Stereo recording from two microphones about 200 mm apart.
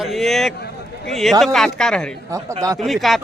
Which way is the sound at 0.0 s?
Centre (ahead or behind).